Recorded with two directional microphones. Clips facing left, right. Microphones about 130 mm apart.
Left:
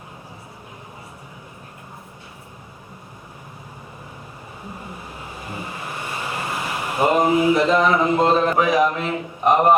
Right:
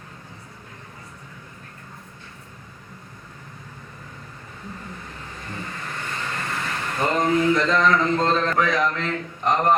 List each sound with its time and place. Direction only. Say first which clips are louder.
4.7 s vehicle: left 2 dB; 15° left (ahead or behind)